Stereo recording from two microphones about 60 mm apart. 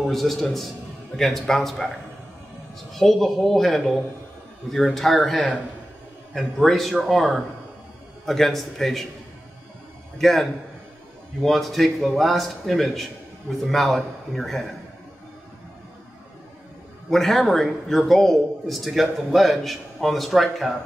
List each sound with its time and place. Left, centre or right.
0.0 s a man's voice: centre
2.9 s a man's voice: centre
10.1 s a man's voice: centre
17.1 s a man's voice: centre